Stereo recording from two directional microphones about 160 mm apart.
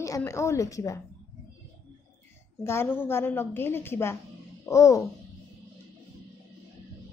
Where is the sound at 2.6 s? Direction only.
15° left (ahead or behind).